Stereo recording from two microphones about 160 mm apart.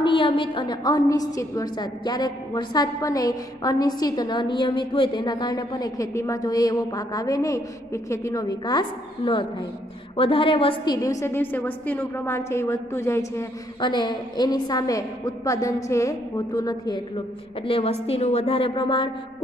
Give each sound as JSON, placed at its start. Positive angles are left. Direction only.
{"t": 0.0, "sound": "a woman's voice", "side_deg": 35}
{"t": 11.0, "sound": "a woman's voice", "side_deg": 20}
{"t": 13.7, "sound": "a woman's voice", "side_deg": 30}
{"t": 17.6, "sound": "a woman's voice", "side_deg": 35}